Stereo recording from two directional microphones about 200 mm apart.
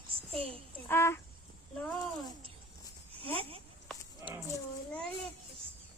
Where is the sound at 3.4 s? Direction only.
30° right (ahead or behind).